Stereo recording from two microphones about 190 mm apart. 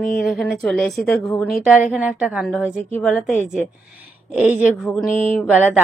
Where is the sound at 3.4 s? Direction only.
5° right (ahead or behind).